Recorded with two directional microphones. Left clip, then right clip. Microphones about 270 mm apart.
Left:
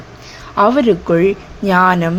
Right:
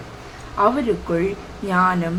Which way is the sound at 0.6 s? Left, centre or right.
Left.